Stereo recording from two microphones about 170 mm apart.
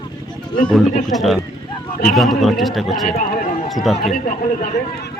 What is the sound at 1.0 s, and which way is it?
Speech, centre (ahead or behind).